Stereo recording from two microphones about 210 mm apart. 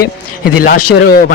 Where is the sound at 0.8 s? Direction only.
90° left.